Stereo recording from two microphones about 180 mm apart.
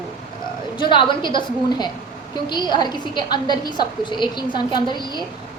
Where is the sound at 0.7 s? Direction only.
25° left (ahead or behind).